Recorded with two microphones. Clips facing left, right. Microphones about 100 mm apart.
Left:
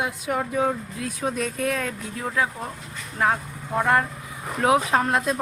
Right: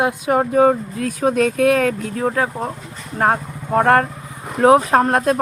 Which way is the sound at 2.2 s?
45° right (ahead or behind).